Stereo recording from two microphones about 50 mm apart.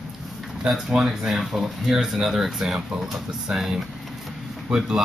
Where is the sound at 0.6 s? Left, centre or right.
Centre.